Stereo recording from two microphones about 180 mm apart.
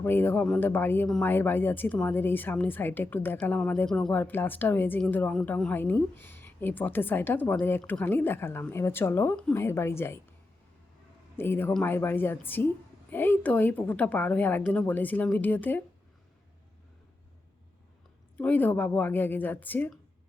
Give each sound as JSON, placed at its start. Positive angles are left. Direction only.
{"t": 0.0, "sound": "speech", "side_deg": 10}
{"t": 11.3, "sound": "speech", "side_deg": 10}
{"t": 18.3, "sound": "speech", "side_deg": 10}